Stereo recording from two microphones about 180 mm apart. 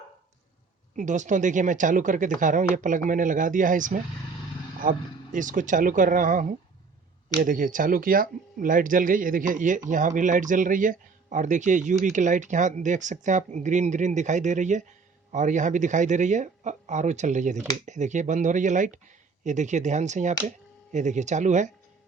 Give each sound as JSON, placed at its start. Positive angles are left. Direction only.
{"t": 0.9, "sound": "speech", "side_deg": -40}
{"t": 7.4, "sound": "speech", "side_deg": -50}